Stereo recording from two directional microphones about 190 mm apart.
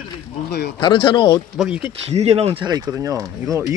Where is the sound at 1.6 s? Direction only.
5° right (ahead or behind).